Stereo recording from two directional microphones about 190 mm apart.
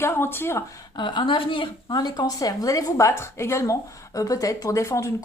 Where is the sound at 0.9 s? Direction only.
25° left (ahead or behind).